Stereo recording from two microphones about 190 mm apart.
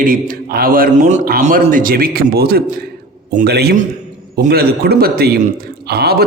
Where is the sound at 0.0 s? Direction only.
45° right (ahead or behind).